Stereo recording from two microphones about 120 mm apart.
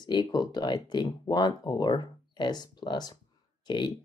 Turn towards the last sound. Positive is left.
turn(degrees=40)  # may be behind; listen again after turning